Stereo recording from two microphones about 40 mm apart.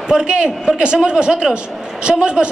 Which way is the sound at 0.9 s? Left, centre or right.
Centre.